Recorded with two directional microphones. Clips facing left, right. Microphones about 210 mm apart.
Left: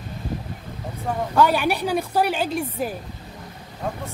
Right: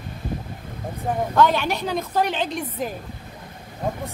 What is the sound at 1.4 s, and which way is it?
Speech, 10° left (ahead or behind).